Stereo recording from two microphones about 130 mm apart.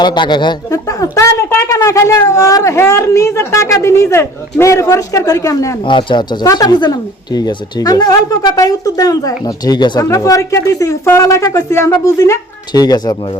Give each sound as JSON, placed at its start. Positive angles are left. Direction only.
{"t": 0.0, "sound": "speech", "side_deg": 35}
{"t": 5.8, "sound": "speech", "side_deg": 40}